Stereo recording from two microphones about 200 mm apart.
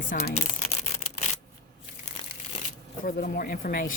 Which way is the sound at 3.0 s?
45° left (ahead or behind).